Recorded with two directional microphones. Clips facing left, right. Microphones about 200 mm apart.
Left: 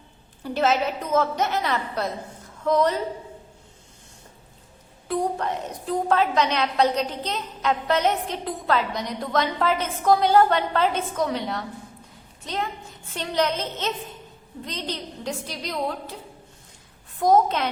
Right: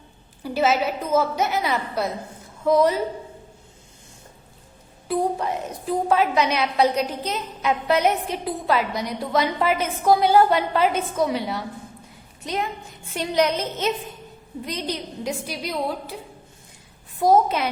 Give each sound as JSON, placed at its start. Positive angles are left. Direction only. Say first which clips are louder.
{"t": 0.4, "sound": "a woman's voice", "louder": "right 1 dB", "side_deg": -5}
{"t": 5.0, "sound": "a woman's voice", "louder": "right 2 dB", "side_deg": -5}
{"t": 17.2, "sound": "a woman's voice", "louder": "right 1 dB", "side_deg": -5}